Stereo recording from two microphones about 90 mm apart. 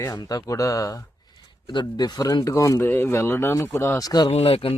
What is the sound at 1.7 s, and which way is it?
Speech, 55° left (ahead or behind).